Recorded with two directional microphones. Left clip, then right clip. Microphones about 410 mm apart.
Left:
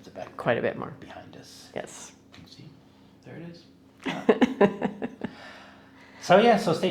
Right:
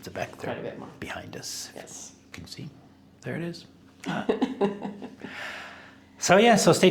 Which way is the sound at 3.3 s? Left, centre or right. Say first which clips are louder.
Right 10 dB; right.